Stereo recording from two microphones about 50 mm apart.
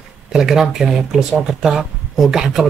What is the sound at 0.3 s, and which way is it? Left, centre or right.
Speech, centre.